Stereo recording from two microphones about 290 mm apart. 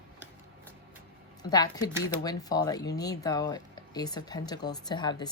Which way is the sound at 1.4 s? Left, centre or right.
Centre.